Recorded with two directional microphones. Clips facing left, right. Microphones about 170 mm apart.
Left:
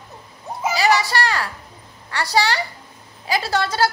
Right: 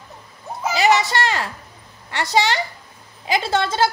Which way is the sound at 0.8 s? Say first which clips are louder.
Right 2 dB; 20° right (ahead or behind).